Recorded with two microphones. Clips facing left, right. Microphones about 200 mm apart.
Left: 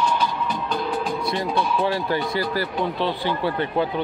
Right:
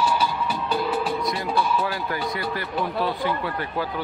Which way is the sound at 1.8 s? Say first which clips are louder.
Left 4 dB; 30° left (ahead or behind).